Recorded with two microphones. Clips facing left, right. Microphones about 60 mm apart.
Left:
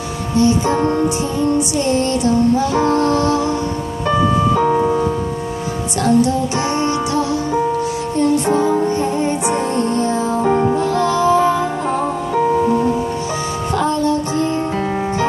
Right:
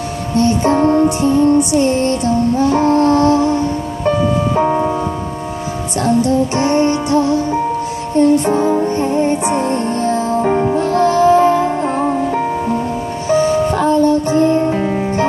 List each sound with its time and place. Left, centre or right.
0.4 s music: right
1.8 s music: right
4.6 s music: right
6.0 s music: right
8.5 s music: right
11.0 s music: right
13.3 s music: right